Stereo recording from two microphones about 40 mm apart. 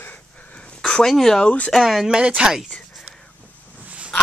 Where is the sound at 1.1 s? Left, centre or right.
Centre.